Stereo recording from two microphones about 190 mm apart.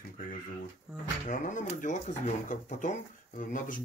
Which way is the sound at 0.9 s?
5° right (ahead or behind).